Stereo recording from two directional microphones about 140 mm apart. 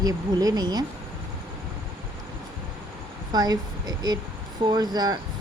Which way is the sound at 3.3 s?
25° right (ahead or behind).